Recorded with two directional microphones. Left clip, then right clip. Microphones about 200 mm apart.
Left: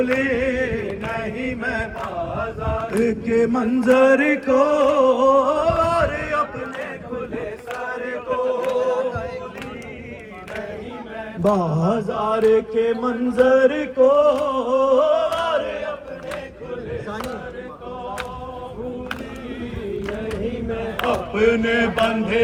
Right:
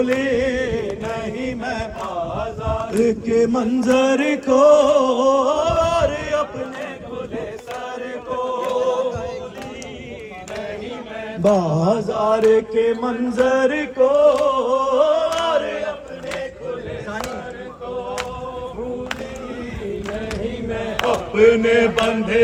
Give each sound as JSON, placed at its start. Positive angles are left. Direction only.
{"t": 0.2, "sound": "mantra", "side_deg": -35}
{"t": 3.1, "sound": "chant", "side_deg": -30}
{"t": 4.7, "sound": "a sound", "side_deg": -40}
{"t": 8.3, "sound": "chant", "side_deg": 0}
{"t": 8.9, "sound": "music", "side_deg": -30}
{"t": 11.4, "sound": "mantra", "side_deg": -55}
{"t": 20.9, "sound": "speech", "side_deg": -50}